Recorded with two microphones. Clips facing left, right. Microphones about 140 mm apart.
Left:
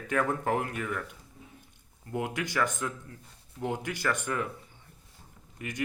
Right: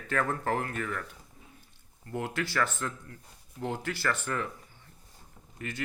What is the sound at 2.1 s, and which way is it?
Speech, 15° left (ahead or behind).